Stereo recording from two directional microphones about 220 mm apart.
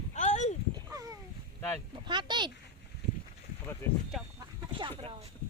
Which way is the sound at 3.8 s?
10° left (ahead or behind).